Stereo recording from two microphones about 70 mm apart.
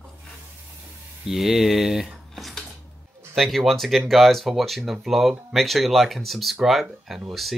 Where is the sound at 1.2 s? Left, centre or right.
Centre.